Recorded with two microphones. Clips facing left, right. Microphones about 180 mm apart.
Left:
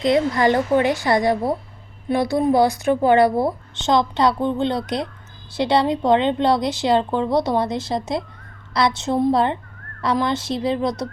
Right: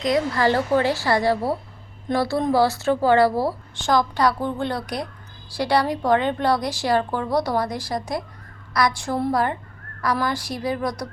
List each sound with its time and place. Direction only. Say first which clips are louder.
0.0 s a woman's voice: left 3 dB; 20° left (ahead or behind)